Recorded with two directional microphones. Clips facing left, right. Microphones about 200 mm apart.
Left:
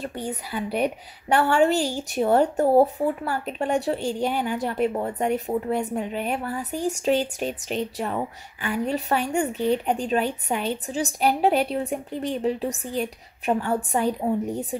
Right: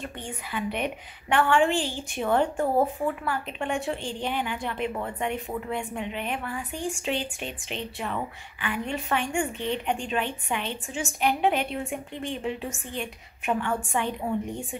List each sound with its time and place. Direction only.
0.0 s speech: 35° left (ahead or behind)